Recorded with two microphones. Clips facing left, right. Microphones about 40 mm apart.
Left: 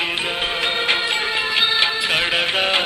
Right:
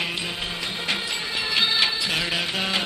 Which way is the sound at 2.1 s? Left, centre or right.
Left.